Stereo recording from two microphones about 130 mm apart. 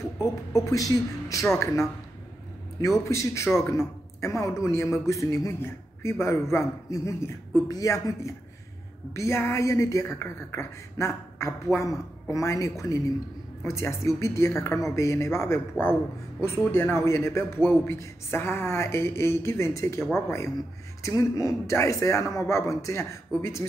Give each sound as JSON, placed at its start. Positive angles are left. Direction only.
{"t": 0.2, "sound": "speech", "side_deg": 25}
{"t": 3.0, "sound": "speech", "side_deg": 20}